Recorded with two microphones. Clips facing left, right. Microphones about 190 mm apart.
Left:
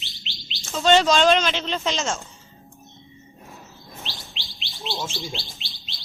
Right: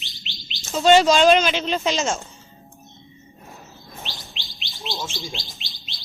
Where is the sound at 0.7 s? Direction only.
10° right (ahead or behind).